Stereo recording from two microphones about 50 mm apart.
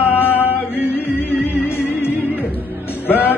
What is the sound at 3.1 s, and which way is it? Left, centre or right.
Music, left.